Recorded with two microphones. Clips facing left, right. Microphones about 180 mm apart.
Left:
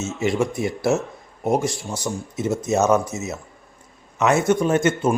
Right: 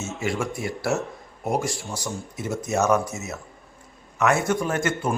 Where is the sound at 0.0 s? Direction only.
20° left (ahead or behind).